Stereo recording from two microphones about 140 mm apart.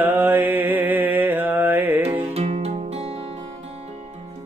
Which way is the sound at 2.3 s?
50° right (ahead or behind).